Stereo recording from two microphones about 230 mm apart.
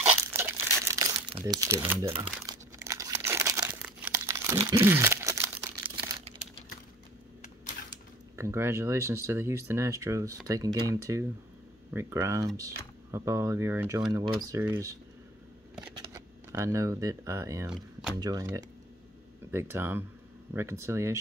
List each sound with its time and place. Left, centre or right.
0.4 s crumpling: centre
1.4 s speech: centre
2.4 s crumpling: centre
8.4 s speech: centre
16.0 s speech: centre